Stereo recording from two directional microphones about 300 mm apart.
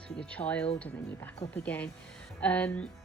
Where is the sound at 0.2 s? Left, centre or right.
Centre.